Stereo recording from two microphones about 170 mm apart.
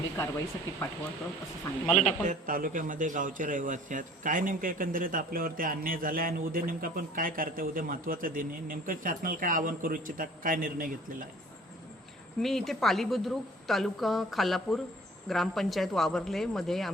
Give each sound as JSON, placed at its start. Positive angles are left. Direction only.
{"t": 0.2, "sound": "speech", "side_deg": 15}
{"t": 2.2, "sound": "a man's voice", "side_deg": -50}
{"t": 12.4, "sound": "a woman's voice", "side_deg": 0}